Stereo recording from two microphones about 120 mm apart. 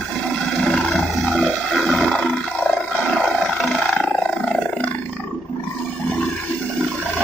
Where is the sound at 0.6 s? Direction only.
5° left (ahead or behind).